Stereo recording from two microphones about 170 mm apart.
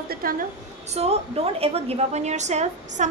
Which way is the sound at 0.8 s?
40° right (ahead or behind).